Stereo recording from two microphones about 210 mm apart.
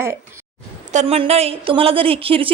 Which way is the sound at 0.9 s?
30° right (ahead or behind).